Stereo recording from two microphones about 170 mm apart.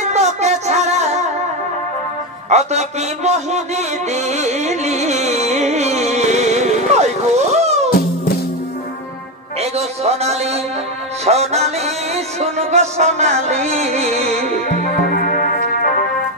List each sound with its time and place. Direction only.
0.0 s music: 40° right (ahead or behind)
2.5 s a sound: 40° right (ahead or behind)
9.6 s music: 40° right (ahead or behind)
14.8 s music: 55° left (ahead or behind)